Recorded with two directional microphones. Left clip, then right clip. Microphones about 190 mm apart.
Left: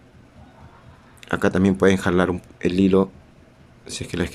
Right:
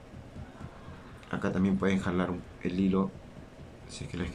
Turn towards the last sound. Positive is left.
turn(degrees=55)  # may be behind; listen again after turning